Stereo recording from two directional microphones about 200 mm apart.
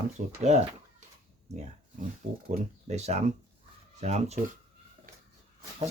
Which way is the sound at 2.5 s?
35° right (ahead or behind).